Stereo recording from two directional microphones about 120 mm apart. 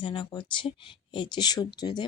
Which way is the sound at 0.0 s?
45° left (ahead or behind).